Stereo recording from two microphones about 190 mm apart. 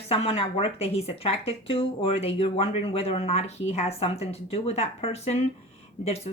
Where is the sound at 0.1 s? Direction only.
30° left (ahead or behind).